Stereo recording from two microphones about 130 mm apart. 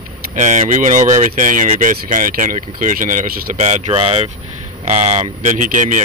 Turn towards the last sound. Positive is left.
turn(degrees=-75)  # may be behind; listen again after turning